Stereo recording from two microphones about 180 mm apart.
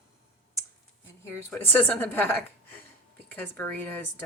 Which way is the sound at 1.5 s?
10° left (ahead or behind).